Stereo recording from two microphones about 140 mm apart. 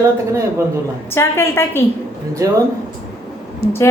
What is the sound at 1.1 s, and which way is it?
Speech, 15° left (ahead or behind).